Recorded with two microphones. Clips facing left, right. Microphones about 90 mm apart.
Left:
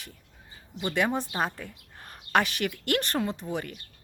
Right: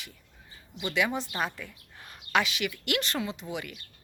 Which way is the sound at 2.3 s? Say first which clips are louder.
Left 2 dB; 50° left (ahead or behind).